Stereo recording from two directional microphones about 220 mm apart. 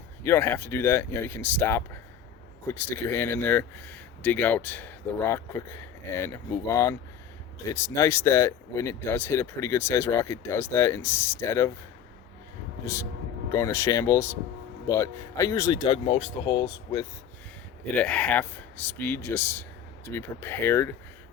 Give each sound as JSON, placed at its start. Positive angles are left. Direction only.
{"t": 0.2, "sound": "speech", "side_deg": 10}
{"t": 7.9, "sound": "speech", "side_deg": 10}
{"t": 13.5, "sound": "speech", "side_deg": 15}
{"t": 17.9, "sound": "speech", "side_deg": 5}